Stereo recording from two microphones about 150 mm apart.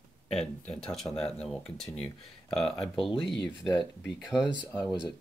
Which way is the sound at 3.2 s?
30° left (ahead or behind).